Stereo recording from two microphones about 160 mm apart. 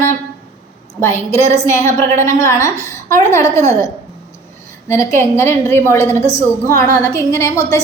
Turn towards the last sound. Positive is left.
turn(degrees=15)  # may be behind; listen again after turning